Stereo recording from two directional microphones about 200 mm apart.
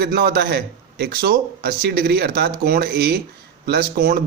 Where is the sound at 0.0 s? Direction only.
50° right (ahead or behind).